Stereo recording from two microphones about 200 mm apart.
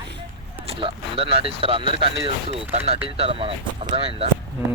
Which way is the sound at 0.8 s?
25° right (ahead or behind).